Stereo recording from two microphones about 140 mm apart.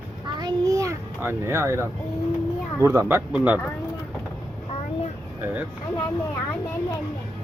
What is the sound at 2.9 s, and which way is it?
Speech, 15° right (ahead or behind).